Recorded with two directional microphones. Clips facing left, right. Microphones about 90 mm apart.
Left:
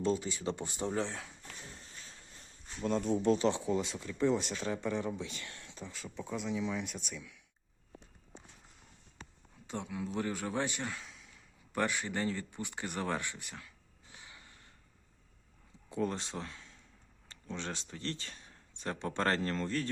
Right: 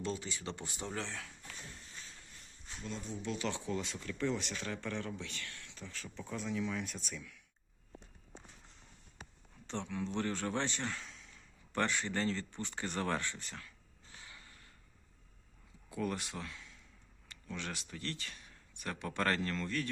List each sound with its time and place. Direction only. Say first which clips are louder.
0.0 s a sound: left 7 dB; 25° left (ahead or behind)
2.8 s speech: left 12 dB; 60° left (ahead or behind)
3.2 s speech: left 7 dB; 30° left (ahead or behind)
5.9 s speech: left 3 dB; 15° left (ahead or behind)
9.6 s speech: even; 10° left (ahead or behind)
15.9 s speech: left 3 dB; 25° left (ahead or behind)